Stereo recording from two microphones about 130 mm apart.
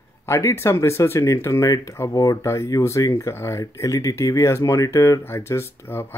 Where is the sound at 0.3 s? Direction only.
20° left (ahead or behind).